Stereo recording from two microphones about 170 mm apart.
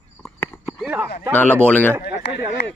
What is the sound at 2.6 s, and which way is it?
Speech, 85° left.